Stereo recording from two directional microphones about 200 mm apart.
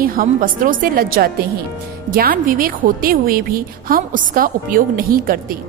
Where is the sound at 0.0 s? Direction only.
45° right (ahead or behind).